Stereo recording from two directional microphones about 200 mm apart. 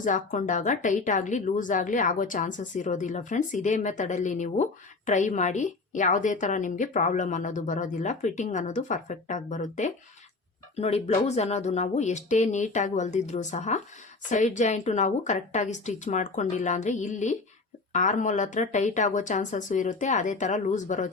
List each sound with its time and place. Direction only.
0.0 s speech: 40° left (ahead or behind)